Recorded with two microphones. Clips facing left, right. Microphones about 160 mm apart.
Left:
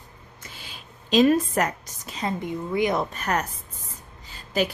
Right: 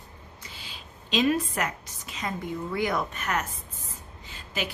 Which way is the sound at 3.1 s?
35° left (ahead or behind).